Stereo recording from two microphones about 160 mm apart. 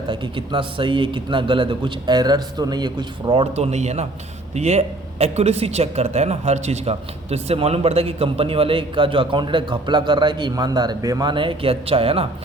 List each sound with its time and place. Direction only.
0.1 s speech: 30° right (ahead or behind)
3.5 s speech: 45° right (ahead or behind)